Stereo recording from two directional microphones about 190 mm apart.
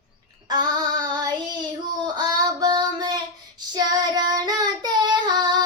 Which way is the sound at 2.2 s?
20° right (ahead or behind).